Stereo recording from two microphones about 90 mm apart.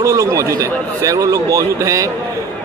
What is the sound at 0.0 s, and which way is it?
A man's voice, 35° right (ahead or behind).